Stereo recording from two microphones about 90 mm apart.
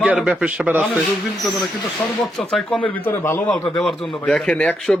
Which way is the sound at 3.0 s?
30° left (ahead or behind).